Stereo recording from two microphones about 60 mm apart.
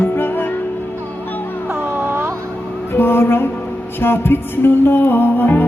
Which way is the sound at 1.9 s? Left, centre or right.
Right.